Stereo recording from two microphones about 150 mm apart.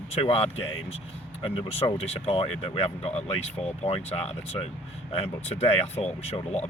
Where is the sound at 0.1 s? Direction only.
40° left (ahead or behind).